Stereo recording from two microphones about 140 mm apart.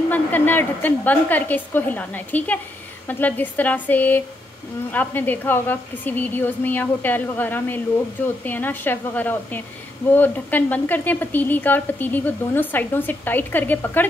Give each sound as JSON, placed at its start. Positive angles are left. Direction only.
{"t": 0.1, "sound": "speech", "side_deg": 15}